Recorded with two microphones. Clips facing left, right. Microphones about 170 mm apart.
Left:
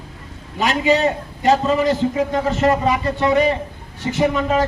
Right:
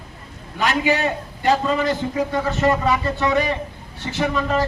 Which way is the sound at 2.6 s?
20° left (ahead or behind).